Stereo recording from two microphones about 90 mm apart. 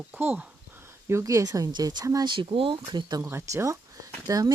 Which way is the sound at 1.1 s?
35° right (ahead or behind).